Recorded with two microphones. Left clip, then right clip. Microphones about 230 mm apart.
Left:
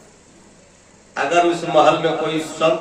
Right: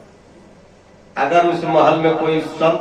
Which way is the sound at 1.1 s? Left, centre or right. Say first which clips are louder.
Right 2 dB; left.